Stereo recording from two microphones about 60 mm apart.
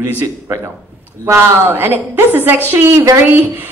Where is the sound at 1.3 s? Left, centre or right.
Right.